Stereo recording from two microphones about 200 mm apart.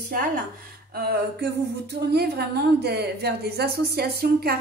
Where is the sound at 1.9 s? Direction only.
55° right (ahead or behind).